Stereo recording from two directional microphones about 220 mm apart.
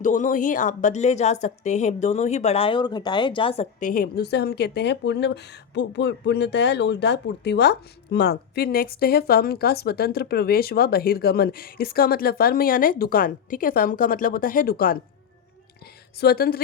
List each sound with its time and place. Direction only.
0.0 s a woman's voice: 35° left (ahead or behind)
16.2 s a woman's voice: 45° left (ahead or behind)